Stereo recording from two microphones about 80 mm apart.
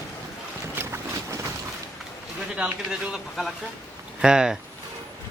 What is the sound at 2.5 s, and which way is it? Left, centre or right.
Speech, centre.